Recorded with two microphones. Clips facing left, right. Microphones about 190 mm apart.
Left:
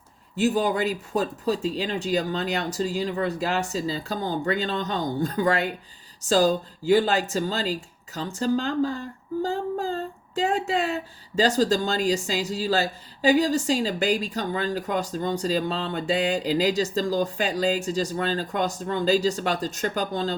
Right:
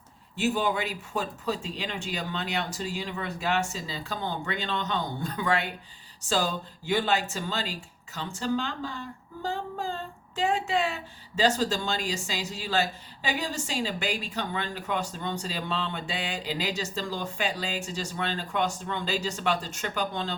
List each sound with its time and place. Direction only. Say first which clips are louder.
0.3 s speech: left 5 dB; 40° left (ahead or behind)